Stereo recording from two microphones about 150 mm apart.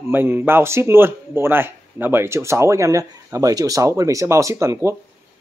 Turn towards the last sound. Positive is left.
turn(degrees=-20)  # may be behind; listen again after turning